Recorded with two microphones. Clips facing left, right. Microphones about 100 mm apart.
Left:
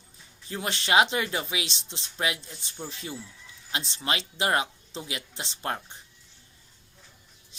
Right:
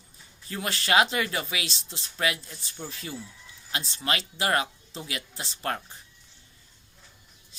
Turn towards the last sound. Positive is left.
turn(degrees=20)  # may be behind; listen again after turning